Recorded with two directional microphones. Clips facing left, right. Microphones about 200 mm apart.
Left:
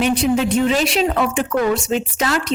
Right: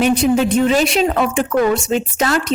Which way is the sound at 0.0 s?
45° right (ahead or behind).